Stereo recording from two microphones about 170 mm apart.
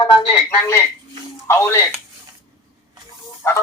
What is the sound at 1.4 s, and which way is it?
Speech, 15° left (ahead or behind).